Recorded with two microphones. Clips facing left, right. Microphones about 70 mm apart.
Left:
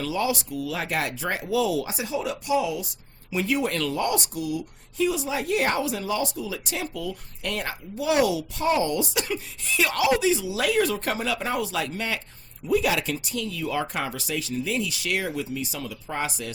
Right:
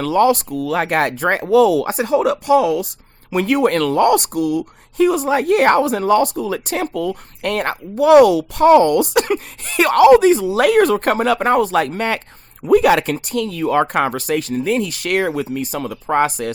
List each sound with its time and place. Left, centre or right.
0.0 s speech: right